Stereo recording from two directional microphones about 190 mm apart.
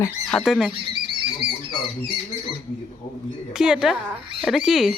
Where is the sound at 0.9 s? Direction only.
25° right (ahead or behind).